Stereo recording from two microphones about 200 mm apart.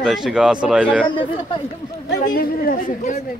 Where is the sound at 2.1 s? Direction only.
45° left (ahead or behind).